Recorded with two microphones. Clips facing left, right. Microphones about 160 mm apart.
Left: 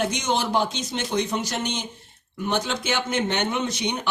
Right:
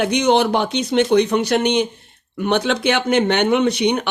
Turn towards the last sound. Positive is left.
turn(degrees=-70)  # may be behind; listen again after turning